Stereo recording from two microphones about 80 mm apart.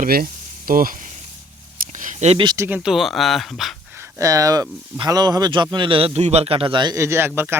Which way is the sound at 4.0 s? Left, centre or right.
Right.